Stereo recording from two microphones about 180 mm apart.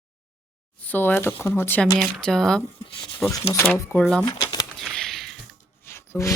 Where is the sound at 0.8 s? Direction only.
10° left (ahead or behind).